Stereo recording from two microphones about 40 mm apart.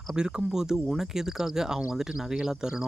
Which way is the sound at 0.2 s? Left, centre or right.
Right.